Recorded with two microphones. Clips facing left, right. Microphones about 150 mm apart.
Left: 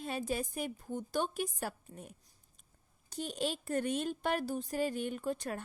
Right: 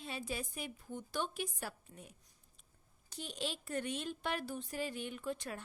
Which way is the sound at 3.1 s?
45° left (ahead or behind).